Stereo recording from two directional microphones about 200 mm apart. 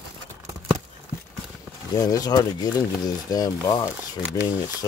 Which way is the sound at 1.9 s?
20° left (ahead or behind).